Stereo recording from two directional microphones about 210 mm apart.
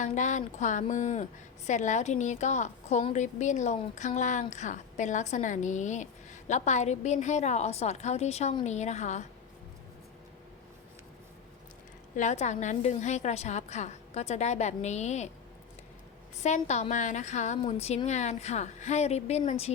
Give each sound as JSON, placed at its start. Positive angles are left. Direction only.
{"t": 0.0, "sound": "a woman's voice", "side_deg": 35}
{"t": 12.1, "sound": "a woman's voice", "side_deg": 35}
{"t": 16.4, "sound": "a woman's voice", "side_deg": 35}